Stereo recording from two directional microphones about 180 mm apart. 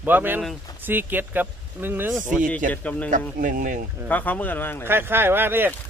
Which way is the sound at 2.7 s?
10° left (ahead or behind).